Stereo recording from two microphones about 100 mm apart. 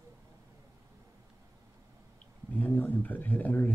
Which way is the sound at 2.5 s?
20° left (ahead or behind).